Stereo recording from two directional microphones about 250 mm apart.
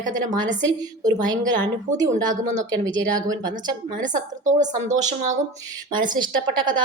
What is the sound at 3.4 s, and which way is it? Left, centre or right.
Speech, centre.